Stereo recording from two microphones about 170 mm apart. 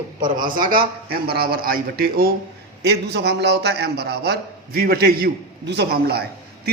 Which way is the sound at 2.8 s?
75° right (ahead or behind).